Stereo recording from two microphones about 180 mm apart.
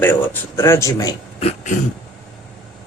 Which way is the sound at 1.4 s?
35° left (ahead or behind).